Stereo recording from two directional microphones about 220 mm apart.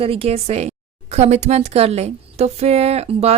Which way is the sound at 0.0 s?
25° right (ahead or behind).